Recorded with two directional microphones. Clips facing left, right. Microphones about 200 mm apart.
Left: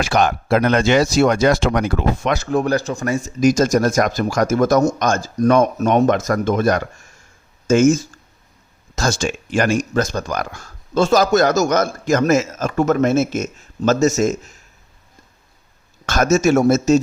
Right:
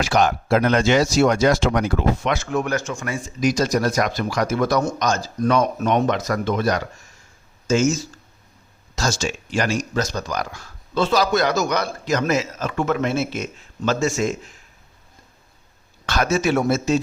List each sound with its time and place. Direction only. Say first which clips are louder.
0.0 s speech: left 1 dB; 55° left (ahead or behind)
2.3 s speech: left 4 dB; 35° left (ahead or behind)
16.0 s speech: left 5 dB; 45° left (ahead or behind)